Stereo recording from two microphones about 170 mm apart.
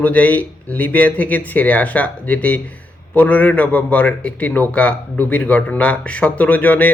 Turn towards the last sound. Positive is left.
turn(degrees=10)  # may be behind; listen again after turning